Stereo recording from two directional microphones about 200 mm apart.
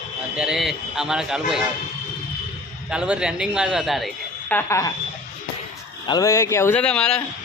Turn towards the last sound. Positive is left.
turn(degrees=5)  # may be behind; listen again after turning